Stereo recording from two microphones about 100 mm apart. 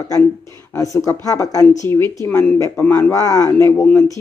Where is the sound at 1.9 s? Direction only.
25° left (ahead or behind).